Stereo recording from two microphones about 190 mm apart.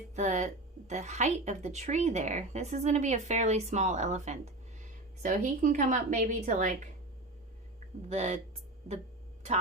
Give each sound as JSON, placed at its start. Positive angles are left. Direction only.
{"t": 0.2, "sound": "a woman's voice", "side_deg": -40}
{"t": 8.1, "sound": "a woman's voice", "side_deg": -35}